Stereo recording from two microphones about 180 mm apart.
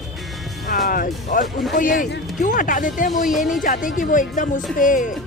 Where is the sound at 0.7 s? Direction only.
50° left (ahead or behind).